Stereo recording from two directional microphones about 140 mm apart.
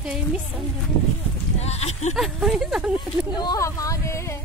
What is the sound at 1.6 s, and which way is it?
Speech, 50° left (ahead or behind).